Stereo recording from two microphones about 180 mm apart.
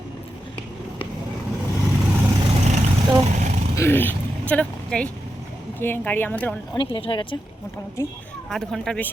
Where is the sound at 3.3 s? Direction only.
40° right (ahead or behind).